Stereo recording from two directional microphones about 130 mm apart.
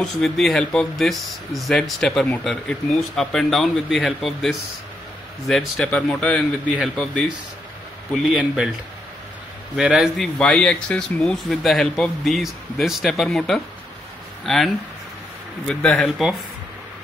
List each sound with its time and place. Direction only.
0.0 s speech: centre (ahead or behind)
8.2 s speech: 5° right (ahead or behind)
9.8 s speech: 5° right (ahead or behind)
15.7 s speech: 5° left (ahead or behind)